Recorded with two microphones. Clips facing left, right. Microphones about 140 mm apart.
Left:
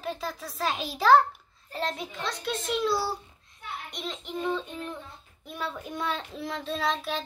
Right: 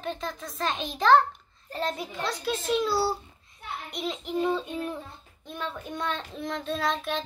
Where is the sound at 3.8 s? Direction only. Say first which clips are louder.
Right 7 dB; 5° right (ahead or behind).